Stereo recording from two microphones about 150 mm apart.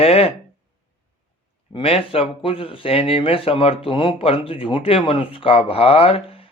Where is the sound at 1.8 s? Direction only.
40° left (ahead or behind).